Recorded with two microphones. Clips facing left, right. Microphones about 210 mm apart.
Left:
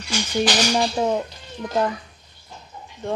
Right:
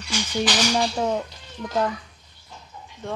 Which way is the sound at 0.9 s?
15° left (ahead or behind).